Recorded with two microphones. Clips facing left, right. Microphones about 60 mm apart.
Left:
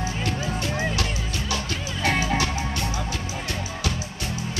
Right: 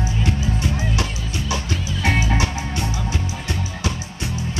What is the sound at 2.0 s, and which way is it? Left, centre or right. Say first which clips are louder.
Music: right 2 dB; right.